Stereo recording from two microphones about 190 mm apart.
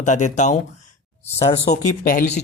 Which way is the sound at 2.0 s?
50° left (ahead or behind).